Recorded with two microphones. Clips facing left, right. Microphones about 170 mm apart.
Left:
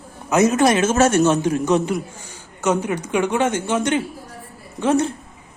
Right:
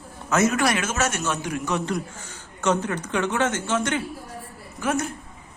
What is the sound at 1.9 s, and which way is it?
A woman's voice, 10° left (ahead or behind).